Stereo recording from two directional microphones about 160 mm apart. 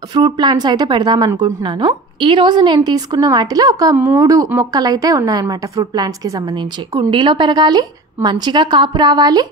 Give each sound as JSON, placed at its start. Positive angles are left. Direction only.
{"t": 0.1, "sound": "a woman's voice", "side_deg": -25}